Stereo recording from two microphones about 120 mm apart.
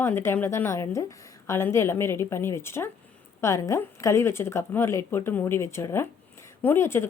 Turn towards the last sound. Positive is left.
turn(degrees=20)  # may be behind; listen again after turning